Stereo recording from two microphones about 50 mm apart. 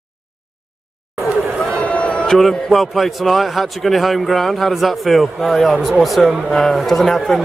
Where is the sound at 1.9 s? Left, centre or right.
Left.